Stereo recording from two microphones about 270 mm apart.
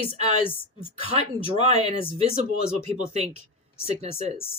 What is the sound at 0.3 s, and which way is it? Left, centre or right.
Speech, centre.